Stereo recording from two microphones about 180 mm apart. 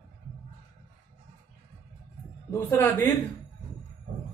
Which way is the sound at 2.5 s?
15° left (ahead or behind).